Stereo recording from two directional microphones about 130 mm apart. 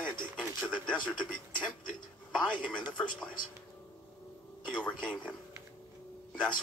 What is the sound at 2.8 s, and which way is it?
Speech, 35° left (ahead or behind).